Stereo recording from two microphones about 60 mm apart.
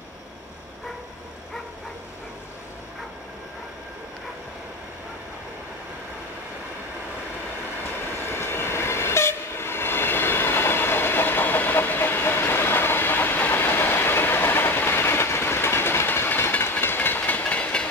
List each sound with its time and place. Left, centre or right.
8.3 s train: left